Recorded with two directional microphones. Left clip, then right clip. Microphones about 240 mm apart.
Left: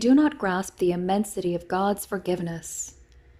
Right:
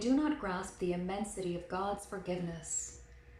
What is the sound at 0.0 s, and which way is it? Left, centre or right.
Speech, left.